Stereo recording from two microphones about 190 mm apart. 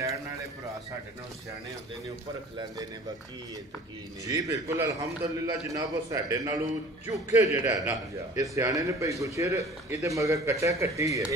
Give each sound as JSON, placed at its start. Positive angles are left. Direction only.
{"t": 4.2, "sound": "a man's voice", "side_deg": -15}